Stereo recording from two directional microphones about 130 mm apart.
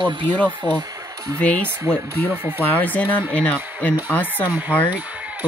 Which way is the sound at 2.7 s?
15° left (ahead or behind).